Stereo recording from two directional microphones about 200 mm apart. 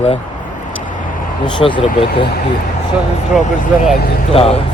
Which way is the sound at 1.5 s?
25° left (ahead or behind).